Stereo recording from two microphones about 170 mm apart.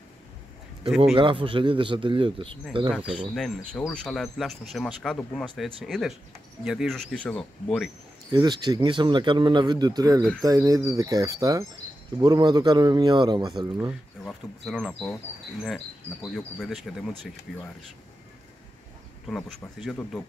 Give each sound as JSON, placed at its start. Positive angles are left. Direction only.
{"t": 0.8, "sound": "speech", "side_deg": 0}
{"t": 1.1, "sound": "a man's voice", "side_deg": -30}
{"t": 3.3, "sound": "speech", "side_deg": 0}
{"t": 8.3, "sound": "speech", "side_deg": -25}
{"t": 14.2, "sound": "speech", "side_deg": 0}
{"t": 19.2, "sound": "speech", "side_deg": 0}